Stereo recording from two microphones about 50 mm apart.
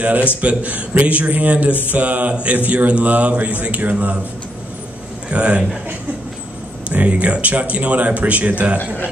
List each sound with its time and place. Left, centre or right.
0.0 s speech: right
5.3 s speech: right
6.9 s speech: right
8.7 s a man's voice: left